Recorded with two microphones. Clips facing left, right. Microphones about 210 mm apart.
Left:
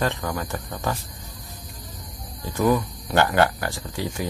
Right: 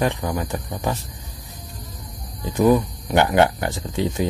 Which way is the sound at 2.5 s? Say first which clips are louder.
Right 4 dB; 15° right (ahead or behind).